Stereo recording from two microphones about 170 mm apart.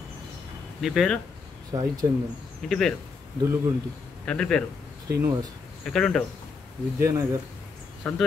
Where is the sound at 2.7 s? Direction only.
5° left (ahead or behind).